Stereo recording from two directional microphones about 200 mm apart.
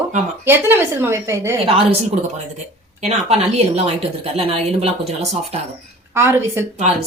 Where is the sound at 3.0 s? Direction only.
30° right (ahead or behind).